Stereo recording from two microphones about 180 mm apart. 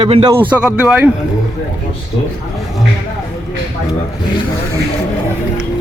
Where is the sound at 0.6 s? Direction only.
5° right (ahead or behind).